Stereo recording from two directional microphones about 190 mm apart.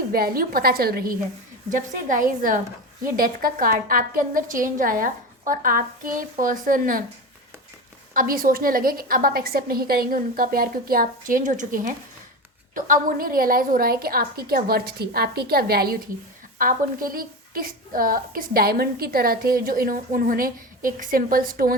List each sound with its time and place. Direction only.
0.1 s a woman's voice: 50° right (ahead or behind)
8.1 s a woman's voice: 50° right (ahead or behind)